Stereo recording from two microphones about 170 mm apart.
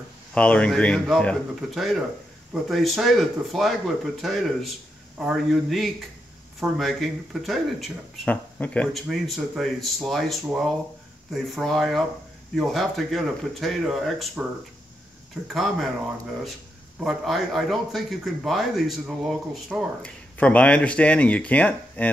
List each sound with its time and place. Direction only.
0.3 s speech: 5° left (ahead or behind)
15.4 s speech: centre (ahead or behind)
17.0 s speech: centre (ahead or behind)
20.0 s speech: 5° left (ahead or behind)